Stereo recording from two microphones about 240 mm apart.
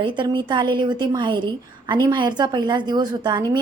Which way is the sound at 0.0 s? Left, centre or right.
Centre.